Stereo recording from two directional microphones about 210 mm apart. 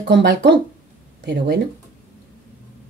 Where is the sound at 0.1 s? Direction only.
55° right (ahead or behind).